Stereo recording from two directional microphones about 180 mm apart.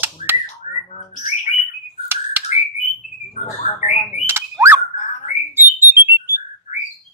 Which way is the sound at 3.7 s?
40° left (ahead or behind).